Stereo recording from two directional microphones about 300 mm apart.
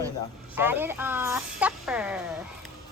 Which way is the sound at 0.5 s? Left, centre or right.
Centre.